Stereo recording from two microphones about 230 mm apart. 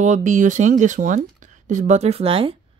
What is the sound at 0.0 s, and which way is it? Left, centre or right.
Speech, right.